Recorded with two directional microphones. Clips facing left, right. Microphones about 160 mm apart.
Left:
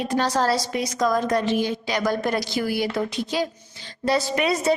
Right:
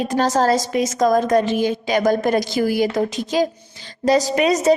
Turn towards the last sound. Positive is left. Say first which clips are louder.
# right 5 dB
turn(degrees=-40)  # may be behind; listen again after turning